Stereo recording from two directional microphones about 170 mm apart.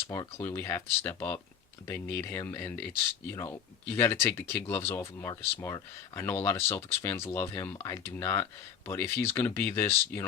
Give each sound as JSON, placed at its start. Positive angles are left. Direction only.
{"t": 0.1, "sound": "speech", "side_deg": 15}